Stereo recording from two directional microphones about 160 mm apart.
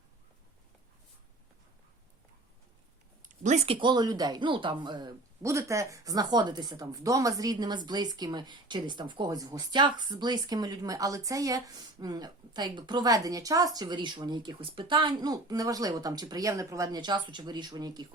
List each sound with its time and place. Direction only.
3.4 s speech: 45° right (ahead or behind); by 18.0 s 25° right (ahead or behind)